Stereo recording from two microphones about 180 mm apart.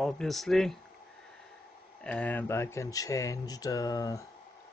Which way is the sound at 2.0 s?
10° left (ahead or behind).